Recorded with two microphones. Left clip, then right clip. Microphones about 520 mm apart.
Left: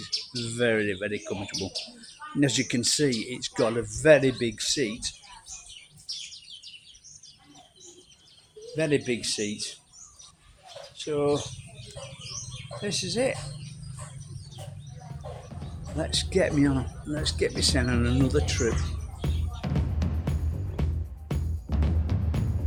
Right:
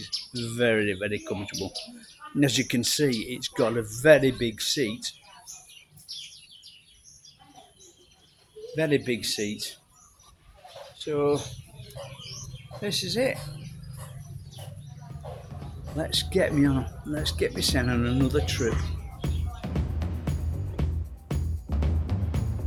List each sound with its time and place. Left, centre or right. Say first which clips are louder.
0.0 s speech: left 1 dB; right
1.5 s speech: left 1 dB; right
2.4 s speech: right 1 dB; right
8.7 s speech: right 1 dB; right
10.9 s speech: right 1 dB; right
12.8 s speech: right 1 dB; right
16.0 s speech: even; right
19.2 s music: left 1 dB; centre